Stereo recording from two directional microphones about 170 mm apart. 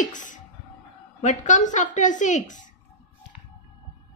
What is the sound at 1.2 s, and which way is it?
A woman's voice, 45° left (ahead or behind).